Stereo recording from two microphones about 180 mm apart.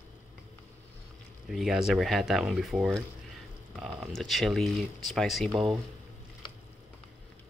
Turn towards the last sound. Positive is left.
turn(degrees=0)  # may be behind; listen again after turning